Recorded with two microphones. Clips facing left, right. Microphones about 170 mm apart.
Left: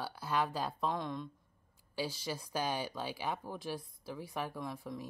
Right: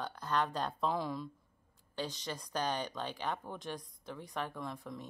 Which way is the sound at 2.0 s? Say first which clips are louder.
Left 2 dB; 5° left (ahead or behind).